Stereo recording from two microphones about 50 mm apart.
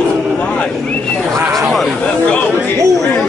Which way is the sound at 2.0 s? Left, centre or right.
Left.